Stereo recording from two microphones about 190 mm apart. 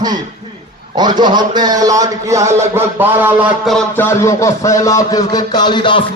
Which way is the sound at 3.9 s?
15° left (ahead or behind).